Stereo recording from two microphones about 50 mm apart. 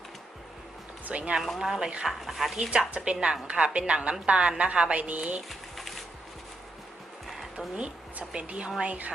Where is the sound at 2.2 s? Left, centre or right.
Centre.